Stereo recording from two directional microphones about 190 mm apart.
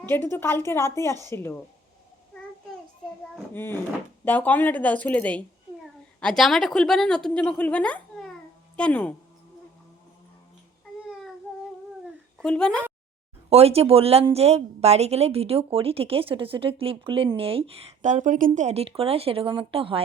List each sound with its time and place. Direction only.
0.0 s a woman's voice: 10° left (ahead or behind)
3.3 s a woman's voice: 10° left (ahead or behind)
12.4 s speech: 5° left (ahead or behind)
13.5 s speech: 30° right (ahead or behind)